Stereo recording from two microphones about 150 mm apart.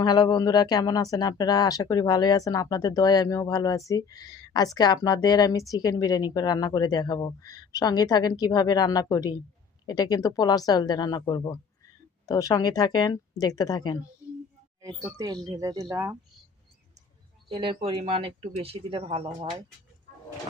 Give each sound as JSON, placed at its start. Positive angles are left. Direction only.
{"t": 0.0, "sound": "speech", "side_deg": 30}
{"t": 14.8, "sound": "speech", "side_deg": -20}
{"t": 17.5, "sound": "speech", "side_deg": -35}